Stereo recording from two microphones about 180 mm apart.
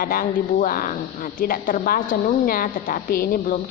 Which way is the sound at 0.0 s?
55° left (ahead or behind).